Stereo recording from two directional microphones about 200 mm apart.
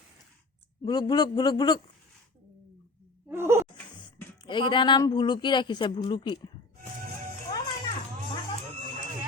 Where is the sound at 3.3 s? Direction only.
10° right (ahead or behind).